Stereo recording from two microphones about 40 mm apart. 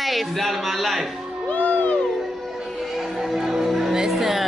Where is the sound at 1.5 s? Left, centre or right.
Left.